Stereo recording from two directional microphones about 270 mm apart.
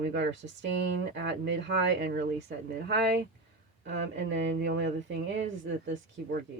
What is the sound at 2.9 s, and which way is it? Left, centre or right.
Speech, right.